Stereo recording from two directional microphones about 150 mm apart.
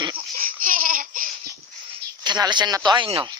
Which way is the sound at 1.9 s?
30° right (ahead or behind).